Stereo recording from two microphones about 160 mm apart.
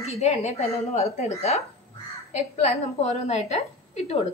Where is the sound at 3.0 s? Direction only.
45° left (ahead or behind).